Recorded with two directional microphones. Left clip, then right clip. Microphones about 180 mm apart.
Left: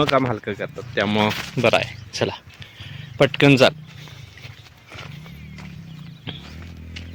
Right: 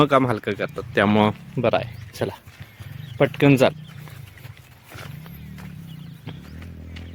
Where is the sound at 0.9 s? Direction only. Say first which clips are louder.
Right 2 dB; 45° right (ahead or behind).